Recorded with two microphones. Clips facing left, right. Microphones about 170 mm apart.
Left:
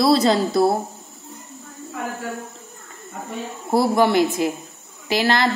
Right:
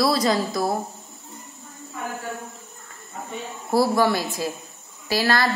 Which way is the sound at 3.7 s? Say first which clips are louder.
Left 2 dB; 20° left (ahead or behind).